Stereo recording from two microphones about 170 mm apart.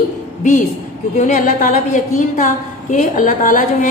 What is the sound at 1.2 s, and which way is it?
A woman's voice, 50° left (ahead or behind).